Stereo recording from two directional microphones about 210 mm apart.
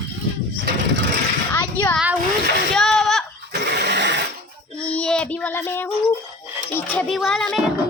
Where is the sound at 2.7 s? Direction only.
Centre (ahead or behind).